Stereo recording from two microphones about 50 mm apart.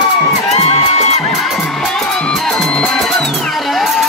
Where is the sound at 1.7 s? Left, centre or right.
Centre.